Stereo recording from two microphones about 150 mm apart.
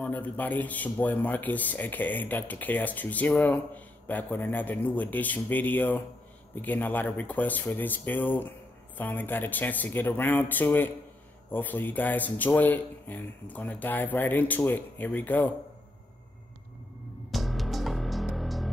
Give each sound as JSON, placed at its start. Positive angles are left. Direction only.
{"t": 0.0, "sound": "a man's voice", "side_deg": 10}
{"t": 17.3, "sound": "music", "side_deg": 0}